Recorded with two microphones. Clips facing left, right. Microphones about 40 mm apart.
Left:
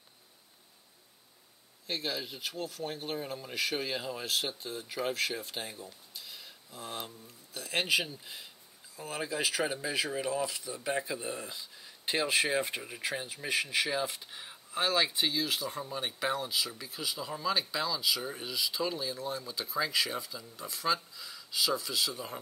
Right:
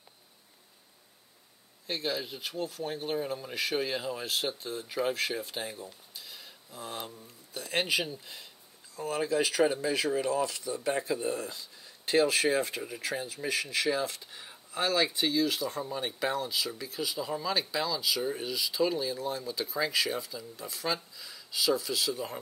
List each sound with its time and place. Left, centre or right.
1.9 s speech: centre
6.1 s a sound: centre
7.5 s speech: centre